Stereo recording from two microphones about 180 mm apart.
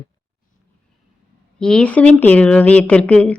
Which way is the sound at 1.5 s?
5° left (ahead or behind).